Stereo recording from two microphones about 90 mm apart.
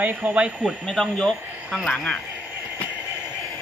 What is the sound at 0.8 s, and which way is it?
Speech, 5° left (ahead or behind).